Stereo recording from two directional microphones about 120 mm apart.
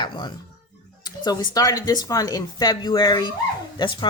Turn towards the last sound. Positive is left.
turn(degrees=40)  # may be behind; listen again after turning